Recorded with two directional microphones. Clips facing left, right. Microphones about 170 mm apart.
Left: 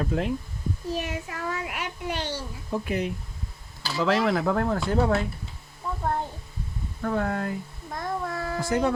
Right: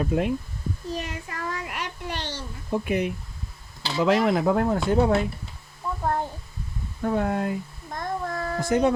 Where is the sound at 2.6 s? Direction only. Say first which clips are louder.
Right 3 dB; 15° right (ahead or behind).